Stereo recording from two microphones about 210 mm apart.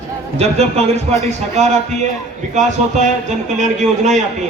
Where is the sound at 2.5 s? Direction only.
35° right (ahead or behind).